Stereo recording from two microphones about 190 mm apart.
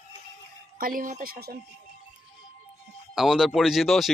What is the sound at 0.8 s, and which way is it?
Speech, 45° right (ahead or behind).